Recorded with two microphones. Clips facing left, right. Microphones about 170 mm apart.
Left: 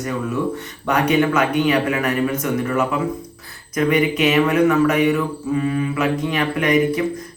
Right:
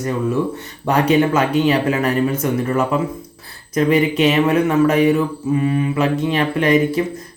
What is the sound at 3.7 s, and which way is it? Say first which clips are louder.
A man's voice: right 2 dB; 30° right (ahead or behind).